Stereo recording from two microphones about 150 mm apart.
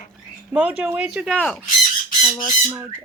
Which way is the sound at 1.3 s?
10° left (ahead or behind).